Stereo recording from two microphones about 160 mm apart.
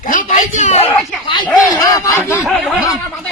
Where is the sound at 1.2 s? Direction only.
30° left (ahead or behind).